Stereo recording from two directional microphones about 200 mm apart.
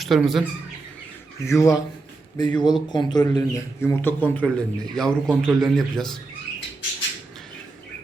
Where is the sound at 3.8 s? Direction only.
10° left (ahead or behind).